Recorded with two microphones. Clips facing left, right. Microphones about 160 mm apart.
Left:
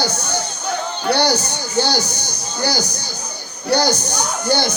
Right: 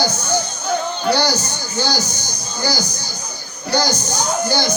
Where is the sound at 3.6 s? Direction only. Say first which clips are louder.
Left 2 dB; 60° left (ahead or behind).